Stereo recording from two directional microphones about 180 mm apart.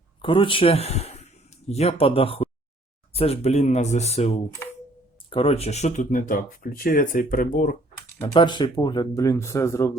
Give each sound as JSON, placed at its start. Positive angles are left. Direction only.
{"t": 0.2, "sound": "speech", "side_deg": 30}
{"t": 8.2, "sound": "speech", "side_deg": 25}